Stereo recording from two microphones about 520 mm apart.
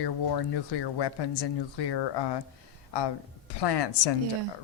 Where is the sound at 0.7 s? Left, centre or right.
Left.